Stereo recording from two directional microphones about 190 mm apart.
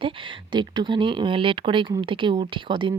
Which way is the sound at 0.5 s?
25° right (ahead or behind).